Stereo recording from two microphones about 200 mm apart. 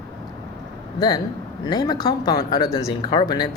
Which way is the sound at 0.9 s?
20° left (ahead or behind).